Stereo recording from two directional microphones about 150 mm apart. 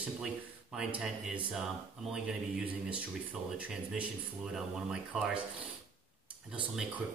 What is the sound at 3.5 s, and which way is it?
Speech, 5° right (ahead or behind).